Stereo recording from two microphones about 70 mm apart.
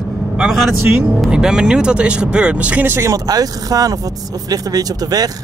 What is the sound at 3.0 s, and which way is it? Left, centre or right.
Speech, right.